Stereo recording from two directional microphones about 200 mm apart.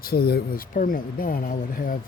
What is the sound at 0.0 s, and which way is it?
Speech, 50° left (ahead or behind).